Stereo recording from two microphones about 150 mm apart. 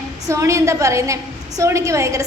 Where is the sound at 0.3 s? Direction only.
20° right (ahead or behind).